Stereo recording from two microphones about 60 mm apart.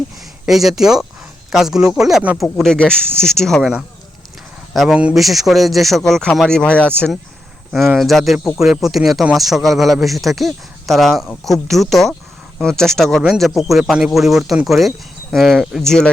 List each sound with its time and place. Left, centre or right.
0.4 s speech: centre
2.6 s speech: centre
4.7 s speech: centre
6.0 s speech: centre
7.8 s speech: centre
15.8 s speech: centre